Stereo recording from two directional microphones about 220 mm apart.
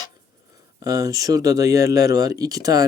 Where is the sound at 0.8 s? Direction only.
15° right (ahead or behind).